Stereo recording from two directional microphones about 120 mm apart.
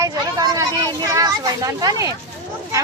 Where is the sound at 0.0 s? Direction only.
30° right (ahead or behind).